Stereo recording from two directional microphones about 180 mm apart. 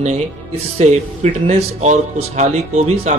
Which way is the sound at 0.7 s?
40° right (ahead or behind).